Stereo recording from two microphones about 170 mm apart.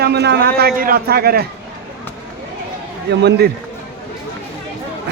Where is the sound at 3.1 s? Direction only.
80° right.